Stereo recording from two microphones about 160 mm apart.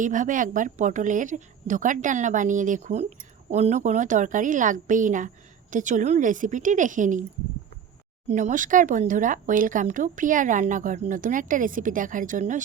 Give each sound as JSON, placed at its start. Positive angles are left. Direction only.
{"t": 0.0, "sound": "a woman's voice", "side_deg": -55}
{"t": 8.3, "sound": "speech", "side_deg": -50}